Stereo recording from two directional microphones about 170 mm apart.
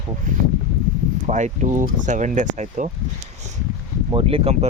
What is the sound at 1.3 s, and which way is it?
Speech, 45° right (ahead or behind).